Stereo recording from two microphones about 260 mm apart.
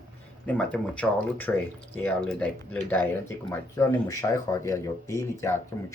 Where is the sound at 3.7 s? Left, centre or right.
Centre.